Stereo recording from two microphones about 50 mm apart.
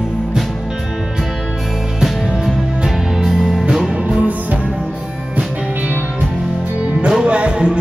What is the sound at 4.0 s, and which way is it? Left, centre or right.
Music, right.